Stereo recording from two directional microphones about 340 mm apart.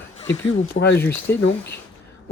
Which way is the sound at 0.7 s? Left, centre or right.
Left.